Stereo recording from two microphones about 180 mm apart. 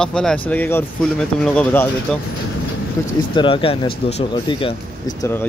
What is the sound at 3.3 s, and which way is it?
Speech, 30° left (ahead or behind).